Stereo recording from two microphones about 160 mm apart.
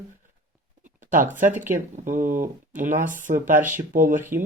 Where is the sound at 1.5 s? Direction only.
55° right (ahead or behind).